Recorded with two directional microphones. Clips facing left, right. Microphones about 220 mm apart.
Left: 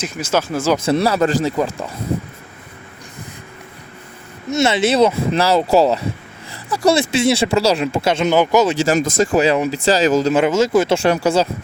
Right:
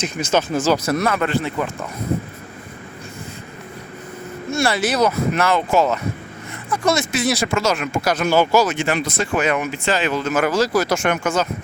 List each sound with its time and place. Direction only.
0.0 s speech: 5° left (ahead or behind)
0.9 s speech: 30° left (ahead or behind)
4.5 s speech: 20° left (ahead or behind)
8.8 s speech: 40° left (ahead or behind)
10.3 s speech: 25° left (ahead or behind)